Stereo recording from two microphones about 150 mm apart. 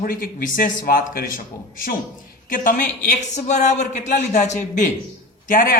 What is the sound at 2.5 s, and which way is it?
Speech, 65° left (ahead or behind).